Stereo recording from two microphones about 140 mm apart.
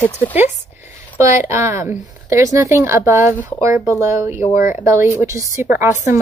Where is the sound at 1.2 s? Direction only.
20° right (ahead or behind).